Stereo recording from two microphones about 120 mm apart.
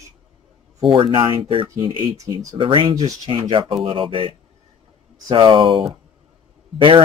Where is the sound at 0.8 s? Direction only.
45° right (ahead or behind).